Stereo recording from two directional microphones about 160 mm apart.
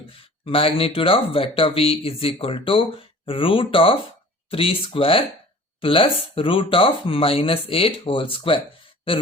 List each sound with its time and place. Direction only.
0.4 s speech: 35° left (ahead or behind)